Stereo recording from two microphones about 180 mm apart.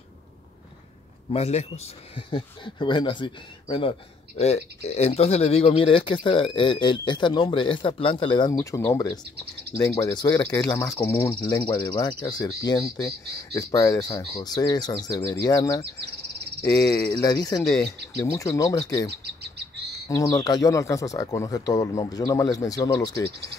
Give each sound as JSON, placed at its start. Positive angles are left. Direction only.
{"t": 1.3, "sound": "a man's voice", "side_deg": 35}
{"t": 20.1, "sound": "speech", "side_deg": 20}